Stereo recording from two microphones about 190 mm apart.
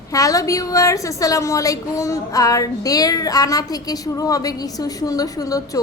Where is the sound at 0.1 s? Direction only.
20° left (ahead or behind).